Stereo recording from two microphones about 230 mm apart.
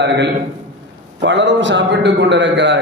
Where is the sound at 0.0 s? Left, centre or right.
Right.